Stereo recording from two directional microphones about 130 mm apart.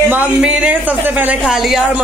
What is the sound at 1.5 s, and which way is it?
Speech, 5° right (ahead or behind).